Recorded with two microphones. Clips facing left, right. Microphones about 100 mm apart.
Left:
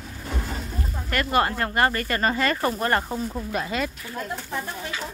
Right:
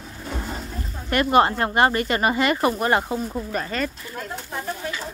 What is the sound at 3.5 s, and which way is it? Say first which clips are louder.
Speech: even; 5° left (ahead or behind).